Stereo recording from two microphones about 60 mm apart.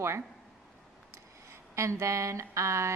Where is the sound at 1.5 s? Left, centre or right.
Right.